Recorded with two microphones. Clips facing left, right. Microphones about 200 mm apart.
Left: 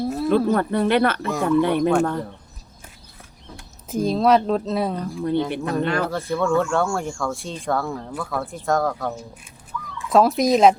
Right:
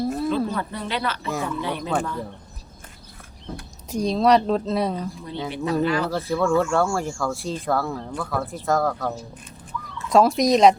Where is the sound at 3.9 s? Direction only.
Centre (ahead or behind).